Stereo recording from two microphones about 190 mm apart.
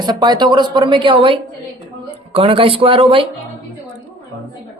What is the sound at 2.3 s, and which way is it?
Speech, 30° right (ahead or behind).